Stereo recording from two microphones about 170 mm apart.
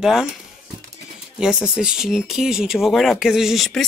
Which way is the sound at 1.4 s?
5° right (ahead or behind).